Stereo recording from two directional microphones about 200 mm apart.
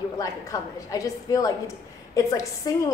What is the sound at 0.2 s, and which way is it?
A woman's voice, 15° left (ahead or behind).